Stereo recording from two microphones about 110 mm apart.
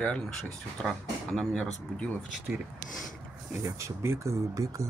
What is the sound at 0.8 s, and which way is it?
Speech, 5° left (ahead or behind).